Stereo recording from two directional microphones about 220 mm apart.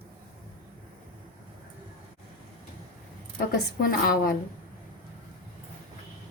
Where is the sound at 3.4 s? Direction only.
45° left (ahead or behind).